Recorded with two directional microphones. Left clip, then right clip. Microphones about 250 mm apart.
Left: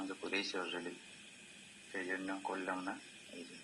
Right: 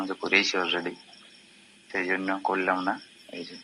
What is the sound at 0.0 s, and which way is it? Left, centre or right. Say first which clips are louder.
Speech: right 16 dB; right.